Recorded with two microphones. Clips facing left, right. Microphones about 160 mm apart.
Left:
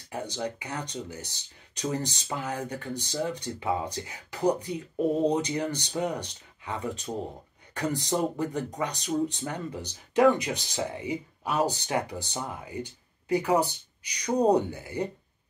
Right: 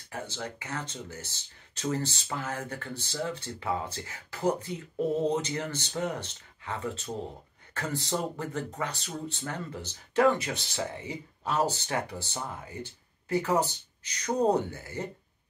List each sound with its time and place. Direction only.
0.1 s speech: 15° left (ahead or behind)